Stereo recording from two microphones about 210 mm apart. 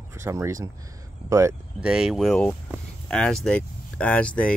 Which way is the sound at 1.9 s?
Centre (ahead or behind).